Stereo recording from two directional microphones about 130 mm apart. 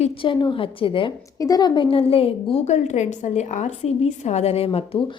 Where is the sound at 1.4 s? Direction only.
30° left (ahead or behind).